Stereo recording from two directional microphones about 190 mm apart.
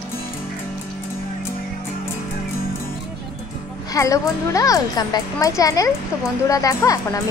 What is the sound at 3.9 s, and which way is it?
Speech, 15° left (ahead or behind).